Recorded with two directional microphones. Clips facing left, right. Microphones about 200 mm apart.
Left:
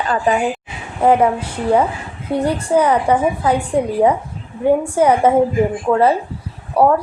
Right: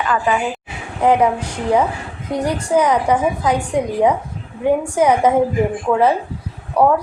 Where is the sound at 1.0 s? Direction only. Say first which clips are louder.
Left 1 dB; 10° left (ahead or behind).